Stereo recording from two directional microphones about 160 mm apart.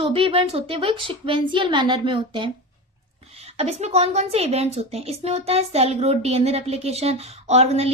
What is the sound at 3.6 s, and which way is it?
A woman's voice, 45° right (ahead or behind).